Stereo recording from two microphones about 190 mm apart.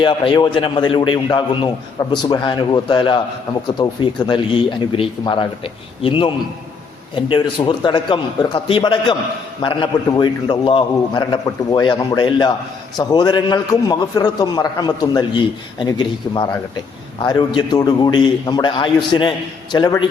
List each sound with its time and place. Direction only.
0.0 s a man's voice: 25° left (ahead or behind)